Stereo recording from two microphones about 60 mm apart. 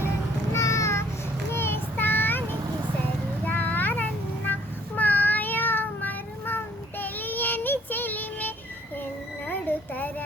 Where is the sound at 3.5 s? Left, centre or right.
Left.